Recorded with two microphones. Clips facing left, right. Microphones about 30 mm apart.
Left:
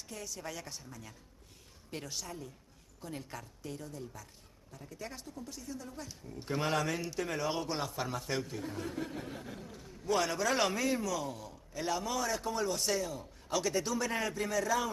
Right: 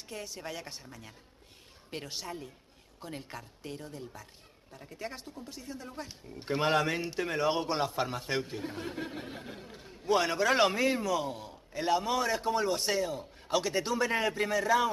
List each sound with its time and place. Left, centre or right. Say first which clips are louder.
0.1 s speech: right 3 dB; right
1.9 s speech: right 3 dB; right